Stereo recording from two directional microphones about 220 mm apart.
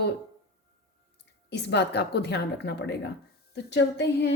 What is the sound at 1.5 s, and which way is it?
A woman's voice, 50° left (ahead or behind).